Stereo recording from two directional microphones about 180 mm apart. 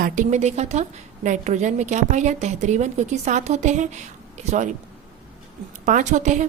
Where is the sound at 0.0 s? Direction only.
40° right (ahead or behind).